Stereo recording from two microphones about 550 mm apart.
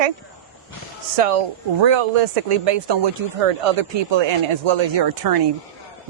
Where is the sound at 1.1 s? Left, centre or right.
Right.